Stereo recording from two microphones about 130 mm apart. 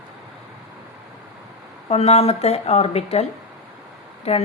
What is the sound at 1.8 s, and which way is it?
A woman's voice, 55° left (ahead or behind).